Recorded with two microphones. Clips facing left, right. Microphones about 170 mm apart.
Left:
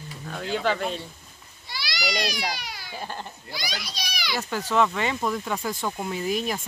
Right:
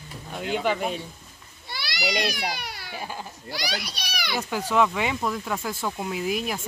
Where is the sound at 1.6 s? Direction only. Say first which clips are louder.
Right 1 dB; 55° right (ahead or behind).